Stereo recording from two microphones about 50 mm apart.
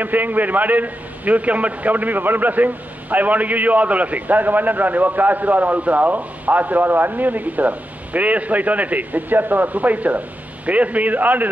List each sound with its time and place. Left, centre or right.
0.0 s a man's voice: right